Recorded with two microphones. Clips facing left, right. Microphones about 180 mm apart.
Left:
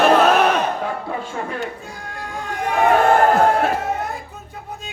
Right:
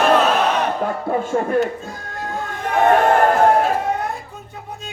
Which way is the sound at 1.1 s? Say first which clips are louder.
Right 8 dB; 50° right (ahead or behind).